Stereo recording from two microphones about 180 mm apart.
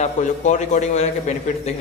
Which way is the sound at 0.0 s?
40° left (ahead or behind).